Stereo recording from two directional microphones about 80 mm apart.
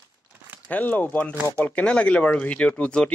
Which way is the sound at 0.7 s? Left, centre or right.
Centre.